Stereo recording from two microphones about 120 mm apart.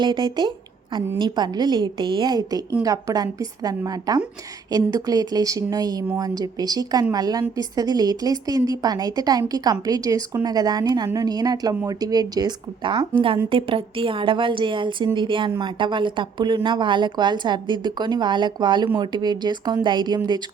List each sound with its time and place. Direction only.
0.0 s a woman's voice: 40° right (ahead or behind)